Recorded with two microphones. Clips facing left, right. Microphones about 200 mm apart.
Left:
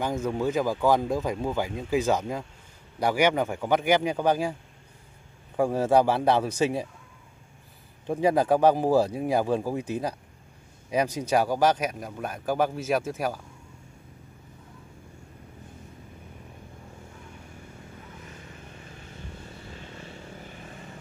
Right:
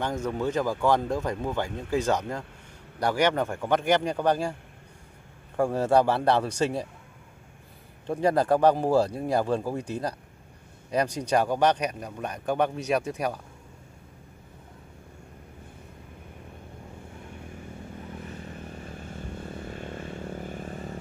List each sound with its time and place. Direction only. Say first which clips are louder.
0.0 s speech: left 1 dB; 10° left (ahead or behind)
5.6 s speech: left 1 dB; 5° left (ahead or behind)
8.1 s speech: left 1 dB; 5° left (ahead or behind)
19.7 s vehicle: right 6 dB; 50° right (ahead or behind)